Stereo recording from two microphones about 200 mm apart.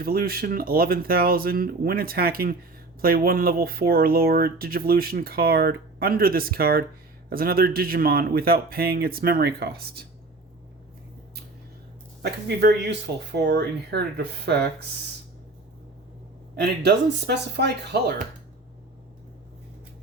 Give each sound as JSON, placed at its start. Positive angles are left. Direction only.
{"t": 0.0, "sound": "speech", "side_deg": -45}
{"t": 12.2, "sound": "speech", "side_deg": -55}
{"t": 16.6, "sound": "speech", "side_deg": -55}